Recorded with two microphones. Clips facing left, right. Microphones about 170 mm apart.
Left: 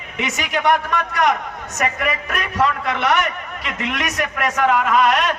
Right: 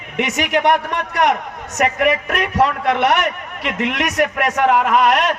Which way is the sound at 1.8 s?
65° right (ahead or behind).